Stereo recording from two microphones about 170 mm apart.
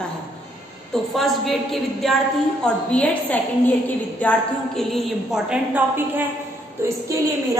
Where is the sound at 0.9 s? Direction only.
Centre (ahead or behind); by 7.6 s 20° right (ahead or behind).